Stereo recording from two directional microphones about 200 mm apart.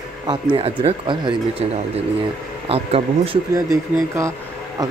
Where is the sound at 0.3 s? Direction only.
25° right (ahead or behind).